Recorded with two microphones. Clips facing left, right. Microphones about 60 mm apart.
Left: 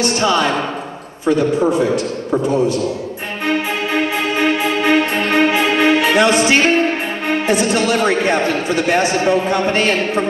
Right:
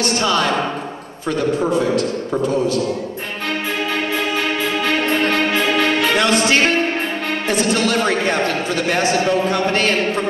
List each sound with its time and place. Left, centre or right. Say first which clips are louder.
0.0 s speech: left 2 dB; centre
3.4 s music: left 4 dB; centre
7.2 s speech: left 5 dB; centre